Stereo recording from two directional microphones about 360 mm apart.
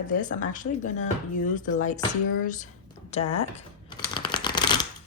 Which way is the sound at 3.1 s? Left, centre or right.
Centre.